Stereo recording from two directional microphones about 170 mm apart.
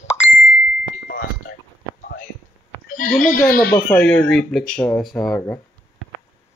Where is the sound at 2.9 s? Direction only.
55° left (ahead or behind).